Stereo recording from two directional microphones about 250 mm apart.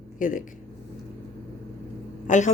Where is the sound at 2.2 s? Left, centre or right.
Left.